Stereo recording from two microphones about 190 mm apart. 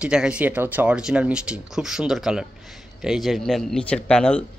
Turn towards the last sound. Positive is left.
turn(degrees=5)  # may be behind; listen again after turning